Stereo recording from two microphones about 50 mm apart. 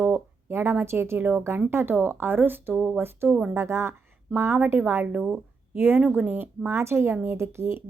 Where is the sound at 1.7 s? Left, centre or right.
Right.